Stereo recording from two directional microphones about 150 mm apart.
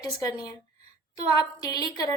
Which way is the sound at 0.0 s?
25° left (ahead or behind).